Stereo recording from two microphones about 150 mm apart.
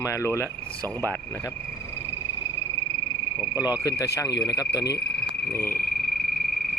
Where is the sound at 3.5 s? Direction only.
25° left (ahead or behind).